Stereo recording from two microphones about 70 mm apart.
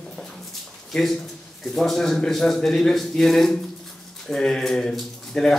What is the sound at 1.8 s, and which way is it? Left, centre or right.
A man's voice, centre.